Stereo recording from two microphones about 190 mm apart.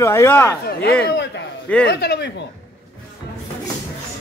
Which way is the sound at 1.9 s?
60° left (ahead or behind).